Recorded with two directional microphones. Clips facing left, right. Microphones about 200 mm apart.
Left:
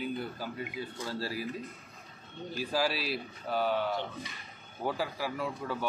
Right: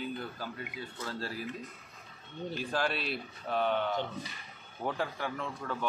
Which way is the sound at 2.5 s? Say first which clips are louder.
Left 2 dB; 5° left (ahead or behind).